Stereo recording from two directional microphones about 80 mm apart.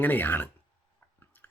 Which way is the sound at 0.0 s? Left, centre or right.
Left.